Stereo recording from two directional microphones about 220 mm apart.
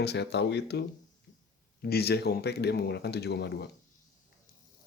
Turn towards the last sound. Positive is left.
turn(degrees=50)  # may be behind; listen again after turning